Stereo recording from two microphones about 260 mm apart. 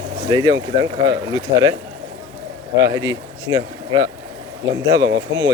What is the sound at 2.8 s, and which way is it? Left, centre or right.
Speech, centre.